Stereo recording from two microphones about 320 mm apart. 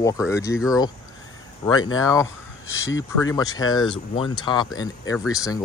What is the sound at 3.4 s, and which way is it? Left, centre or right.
Speech, centre.